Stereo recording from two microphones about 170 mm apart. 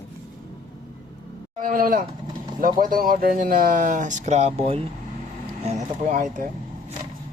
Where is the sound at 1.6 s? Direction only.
55° right (ahead or behind); by 4.8 s 35° right (ahead or behind).